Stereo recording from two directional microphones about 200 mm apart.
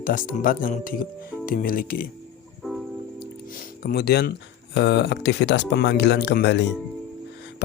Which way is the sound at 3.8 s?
50° left (ahead or behind).